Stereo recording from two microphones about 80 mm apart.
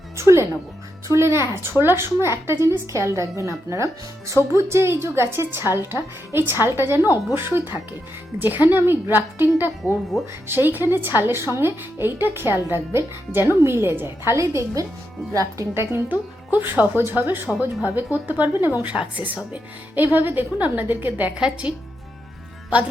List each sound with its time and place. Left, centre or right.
0.2 s music: right
1.0 s a woman's voice: right
7.0 s speech: left
7.3 s speech: right
9.8 s speech: centre
10.5 s speech: right
14.3 s a woman's voice: right
21.3 s speech: centre